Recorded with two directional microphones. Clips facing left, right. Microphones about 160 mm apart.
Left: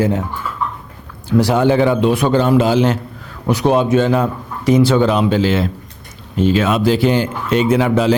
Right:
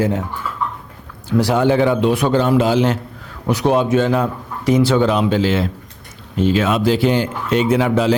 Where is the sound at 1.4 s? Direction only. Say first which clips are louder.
Left 1 dB; 25° left (ahead or behind).